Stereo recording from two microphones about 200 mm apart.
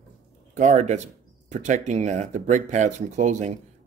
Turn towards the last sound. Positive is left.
turn(degrees=-35)  # may be behind; listen again after turning